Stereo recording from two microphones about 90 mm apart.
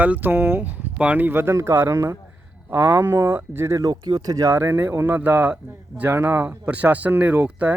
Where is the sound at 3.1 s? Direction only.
30° right (ahead or behind).